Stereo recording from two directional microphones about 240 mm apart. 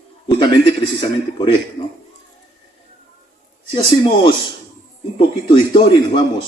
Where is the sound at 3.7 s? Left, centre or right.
Left.